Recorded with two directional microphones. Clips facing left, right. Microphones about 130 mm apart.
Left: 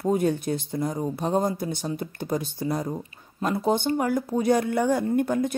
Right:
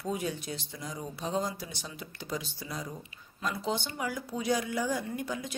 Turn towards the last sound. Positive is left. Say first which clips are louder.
# left 12 dB
turn(degrees=55)  # may be behind; listen again after turning